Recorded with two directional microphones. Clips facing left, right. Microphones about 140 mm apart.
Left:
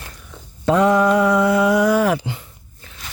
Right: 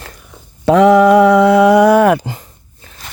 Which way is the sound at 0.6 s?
75° right (ahead or behind).